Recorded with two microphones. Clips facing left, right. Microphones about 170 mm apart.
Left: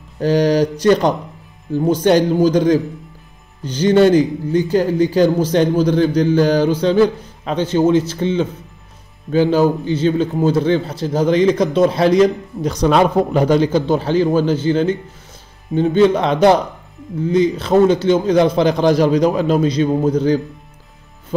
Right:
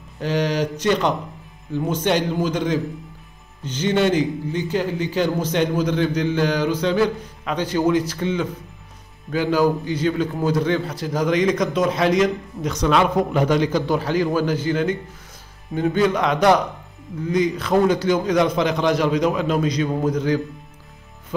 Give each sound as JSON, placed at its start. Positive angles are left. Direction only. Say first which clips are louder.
{"t": 0.2, "sound": "a man's voice", "louder": "left 7 dB", "side_deg": 40}
{"t": 21.3, "sound": "music", "louder": "left 5 dB", "side_deg": 30}